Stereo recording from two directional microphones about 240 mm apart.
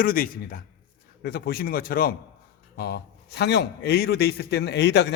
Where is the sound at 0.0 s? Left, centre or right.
Left.